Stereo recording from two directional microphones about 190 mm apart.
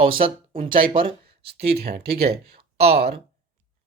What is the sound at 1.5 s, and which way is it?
Speech, 55° right (ahead or behind).